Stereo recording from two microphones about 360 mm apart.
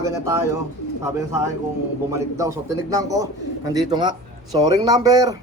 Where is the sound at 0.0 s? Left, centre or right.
Centre.